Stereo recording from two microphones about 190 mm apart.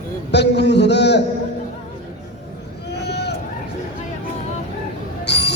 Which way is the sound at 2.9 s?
60° left (ahead or behind).